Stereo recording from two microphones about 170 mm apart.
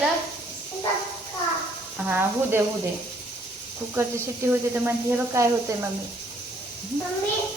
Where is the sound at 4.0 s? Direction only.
15° right (ahead or behind).